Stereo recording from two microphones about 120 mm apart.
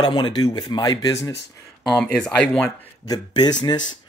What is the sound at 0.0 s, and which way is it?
Speech, 40° left (ahead or behind).